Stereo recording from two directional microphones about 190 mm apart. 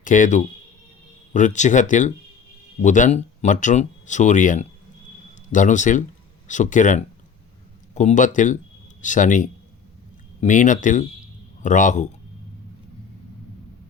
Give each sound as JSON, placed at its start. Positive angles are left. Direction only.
{"t": 0.0, "sound": "speech", "side_deg": 40}